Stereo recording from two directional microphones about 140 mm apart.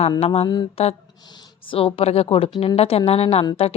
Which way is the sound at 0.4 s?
30° left (ahead or behind).